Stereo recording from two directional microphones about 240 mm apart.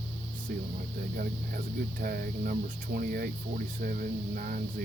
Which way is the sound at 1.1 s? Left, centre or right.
Right.